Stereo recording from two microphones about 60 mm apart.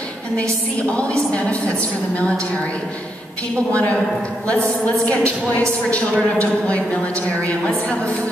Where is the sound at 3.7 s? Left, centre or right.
Left.